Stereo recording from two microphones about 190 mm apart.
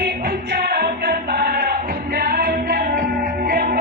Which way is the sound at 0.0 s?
55° right (ahead or behind).